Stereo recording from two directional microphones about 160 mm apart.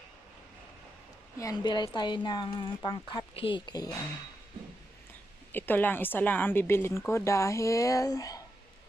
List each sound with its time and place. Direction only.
1.4 s a woman's voice: 25° left (ahead or behind)
5.5 s a woman's voice: 10° left (ahead or behind)